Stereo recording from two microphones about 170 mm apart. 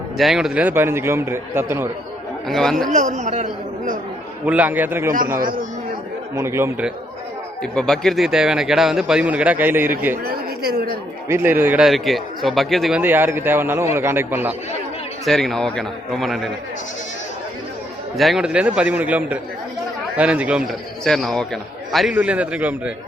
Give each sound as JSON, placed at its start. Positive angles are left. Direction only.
{"t": 0.2, "sound": "a man's voice", "side_deg": 0}
{"t": 2.5, "sound": "speech", "side_deg": 0}
{"t": 2.9, "sound": "speech", "side_deg": -45}
{"t": 4.4, "sound": "a man's voice", "side_deg": -10}
{"t": 6.3, "sound": "a man's voice", "side_deg": -15}
{"t": 7.6, "sound": "speech", "side_deg": 5}
{"t": 10.2, "sound": "a woman's voice", "side_deg": -65}
{"t": 11.3, "sound": "a man's voice", "side_deg": -15}
{"t": 11.9, "sound": "speech", "side_deg": 0}
{"t": 13.0, "sound": "a man's voice", "side_deg": -10}
{"t": 15.2, "sound": "speech", "side_deg": 0}
{"t": 18.2, "sound": "a man's voice", "side_deg": 0}